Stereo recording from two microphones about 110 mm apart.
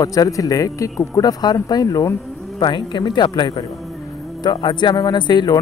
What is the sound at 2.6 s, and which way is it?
A man's voice, 45° left (ahead or behind).